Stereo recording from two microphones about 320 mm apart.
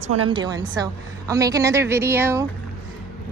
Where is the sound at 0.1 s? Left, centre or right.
Centre.